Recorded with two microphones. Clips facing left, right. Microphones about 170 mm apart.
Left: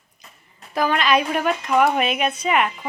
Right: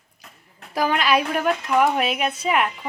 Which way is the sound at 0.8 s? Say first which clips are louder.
Left 1 dB; 10° right (ahead or behind).